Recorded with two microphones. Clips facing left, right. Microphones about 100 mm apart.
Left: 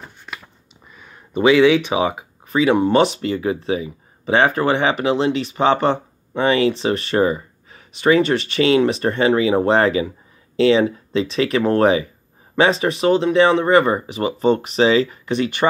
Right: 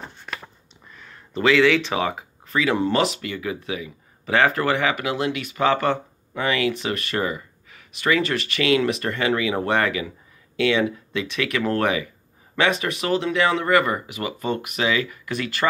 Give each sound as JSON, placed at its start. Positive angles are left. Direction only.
{"t": 0.9, "sound": "speech", "side_deg": 15}